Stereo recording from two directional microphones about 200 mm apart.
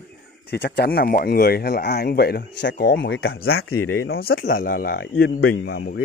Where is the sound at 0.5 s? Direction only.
50° left (ahead or behind).